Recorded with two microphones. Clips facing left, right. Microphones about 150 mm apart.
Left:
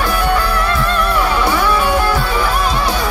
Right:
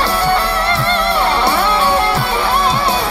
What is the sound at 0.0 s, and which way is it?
Music, 75° right (ahead or behind).